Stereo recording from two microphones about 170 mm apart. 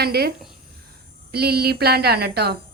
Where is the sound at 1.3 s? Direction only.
65° right (ahead or behind).